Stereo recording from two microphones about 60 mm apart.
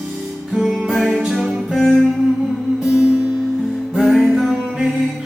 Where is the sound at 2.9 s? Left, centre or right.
Centre.